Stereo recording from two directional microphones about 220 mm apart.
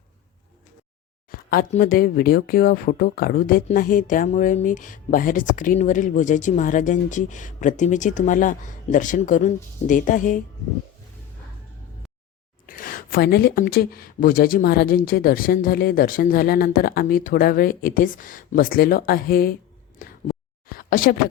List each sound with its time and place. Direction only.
1.5 s speech: 40° left (ahead or behind)
12.6 s speech: 40° left (ahead or behind)
20.0 s a sound: 40° left (ahead or behind)